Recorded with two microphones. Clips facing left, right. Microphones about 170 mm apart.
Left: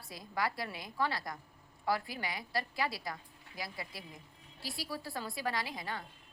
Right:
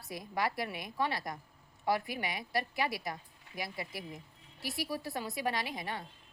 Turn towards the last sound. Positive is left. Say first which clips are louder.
# right 1 dB
turn(degrees=-25)  # may be behind; listen again after turning